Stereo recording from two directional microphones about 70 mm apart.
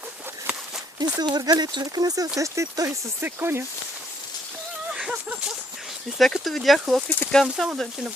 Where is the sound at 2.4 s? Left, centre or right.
Right.